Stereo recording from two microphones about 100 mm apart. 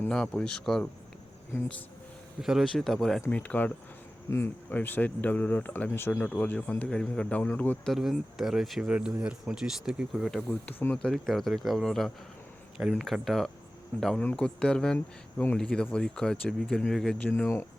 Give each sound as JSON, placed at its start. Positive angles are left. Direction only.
{"t": 0.1, "sound": "speech", "side_deg": 10}
{"t": 2.4, "sound": "speech", "side_deg": -5}
{"t": 3.2, "sound": "speech", "side_deg": 15}
{"t": 6.2, "sound": "speech", "side_deg": 10}
{"t": 7.9, "sound": "speech", "side_deg": 0}
{"t": 10.7, "sound": "speech", "side_deg": 20}
{"t": 10.9, "sound": "speech", "side_deg": 5}
{"t": 14.2, "sound": "speech", "side_deg": 10}
{"t": 17.3, "sound": "speech", "side_deg": 25}